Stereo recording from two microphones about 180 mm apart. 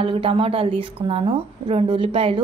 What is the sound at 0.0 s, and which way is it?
Speech, 30° right (ahead or behind).